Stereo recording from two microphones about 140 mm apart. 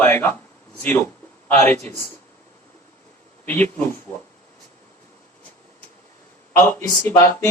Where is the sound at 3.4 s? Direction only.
10° left (ahead or behind).